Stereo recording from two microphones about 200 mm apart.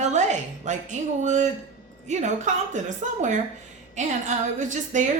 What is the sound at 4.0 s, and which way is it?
Speech, 40° right (ahead or behind).